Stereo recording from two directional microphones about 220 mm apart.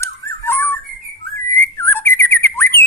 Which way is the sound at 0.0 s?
10° left (ahead or behind).